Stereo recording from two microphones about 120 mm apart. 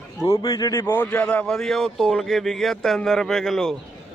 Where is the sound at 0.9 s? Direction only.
15° left (ahead or behind).